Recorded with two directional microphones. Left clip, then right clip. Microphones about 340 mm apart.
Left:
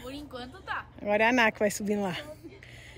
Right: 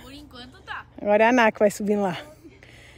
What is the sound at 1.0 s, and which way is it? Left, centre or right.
A woman's voice, right.